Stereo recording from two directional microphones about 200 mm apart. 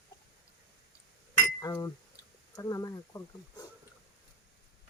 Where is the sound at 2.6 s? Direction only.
15° left (ahead or behind).